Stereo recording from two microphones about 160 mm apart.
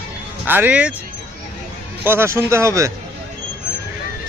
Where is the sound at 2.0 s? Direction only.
15° right (ahead or behind).